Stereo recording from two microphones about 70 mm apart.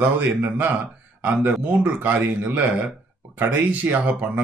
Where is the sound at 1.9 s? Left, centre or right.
Right.